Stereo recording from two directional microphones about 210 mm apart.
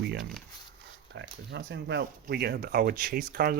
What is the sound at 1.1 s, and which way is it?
Speech, 55° right (ahead or behind).